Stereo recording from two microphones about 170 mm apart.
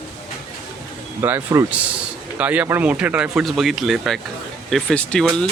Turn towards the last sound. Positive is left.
turn(degrees=5)  # may be behind; listen again after turning